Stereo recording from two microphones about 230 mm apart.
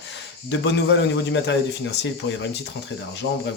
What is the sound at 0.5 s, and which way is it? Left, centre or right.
A man's voice, left.